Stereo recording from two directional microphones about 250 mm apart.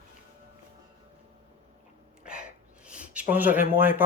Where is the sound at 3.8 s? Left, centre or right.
Centre.